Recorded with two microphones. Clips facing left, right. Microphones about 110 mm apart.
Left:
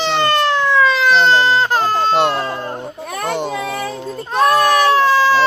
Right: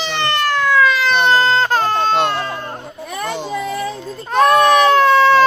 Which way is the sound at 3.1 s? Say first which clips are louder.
Left 2 dB; 60° left (ahead or behind).